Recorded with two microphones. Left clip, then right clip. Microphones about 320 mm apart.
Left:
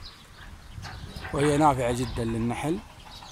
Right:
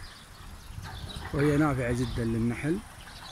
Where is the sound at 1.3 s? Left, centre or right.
Left.